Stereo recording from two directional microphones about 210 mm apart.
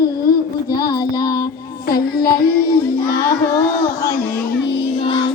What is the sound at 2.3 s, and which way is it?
Child singing, 50° left (ahead or behind).